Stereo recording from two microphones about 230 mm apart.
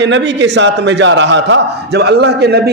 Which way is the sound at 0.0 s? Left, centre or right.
Right.